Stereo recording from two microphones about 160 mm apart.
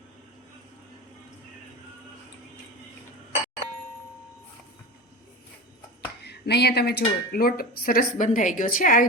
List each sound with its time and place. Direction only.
6.2 s speech: 90° left; by 9.0 s 60° left (ahead or behind)